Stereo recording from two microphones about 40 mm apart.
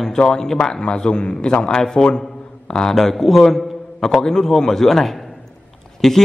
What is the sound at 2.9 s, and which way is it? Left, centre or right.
A man's voice, centre.